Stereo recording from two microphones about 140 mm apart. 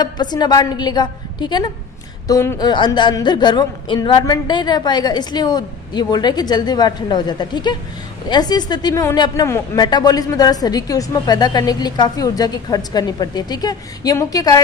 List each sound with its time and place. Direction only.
0.0 s a woman's voice: 30° left (ahead or behind)